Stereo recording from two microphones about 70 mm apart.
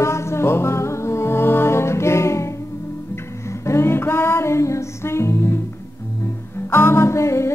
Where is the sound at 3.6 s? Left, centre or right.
Left.